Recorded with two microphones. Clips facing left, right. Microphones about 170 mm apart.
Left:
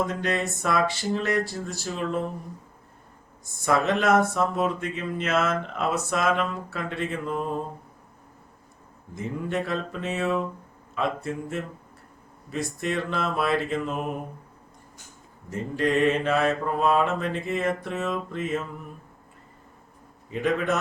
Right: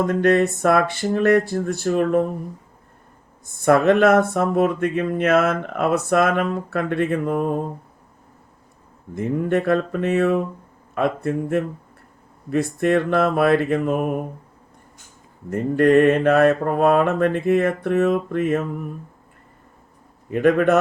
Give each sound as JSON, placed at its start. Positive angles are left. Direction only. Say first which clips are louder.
{"t": 0.0, "sound": "speech", "louder": "right 10 dB", "side_deg": -55}
{"t": 3.4, "sound": "speech", "louder": "right 8 dB", "side_deg": -55}
{"t": 9.1, "sound": "speech", "louder": "right 8 dB", "side_deg": -55}
{"t": 15.4, "sound": "speech", "louder": "right 9 dB", "side_deg": -60}
{"t": 20.3, "sound": "speech", "louder": "right 9 dB", "side_deg": -60}